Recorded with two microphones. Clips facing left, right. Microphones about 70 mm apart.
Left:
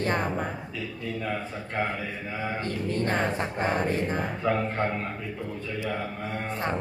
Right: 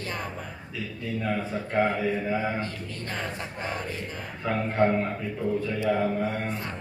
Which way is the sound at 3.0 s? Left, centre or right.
Left.